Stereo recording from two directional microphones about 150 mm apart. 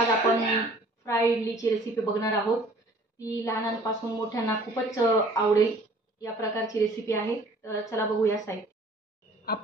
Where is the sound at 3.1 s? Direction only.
25° left (ahead or behind).